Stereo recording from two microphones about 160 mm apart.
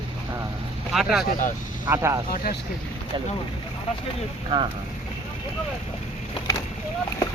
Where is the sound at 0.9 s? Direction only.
Centre (ahead or behind).